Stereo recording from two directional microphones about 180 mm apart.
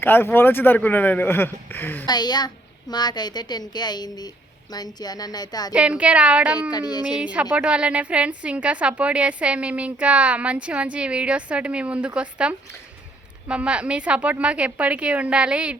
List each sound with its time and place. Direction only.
0.0 s speech: 10° left (ahead or behind)
2.0 s a woman's voice: 25° left (ahead or behind)
5.7 s a woman's voice: 5° right (ahead or behind)
6.7 s a woman's voice: 20° left (ahead or behind)
7.2 s a woman's voice: 5° right (ahead or behind)